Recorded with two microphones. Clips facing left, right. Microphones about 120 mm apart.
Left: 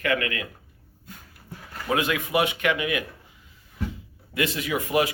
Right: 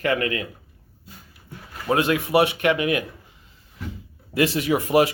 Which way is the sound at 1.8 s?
30° right (ahead or behind).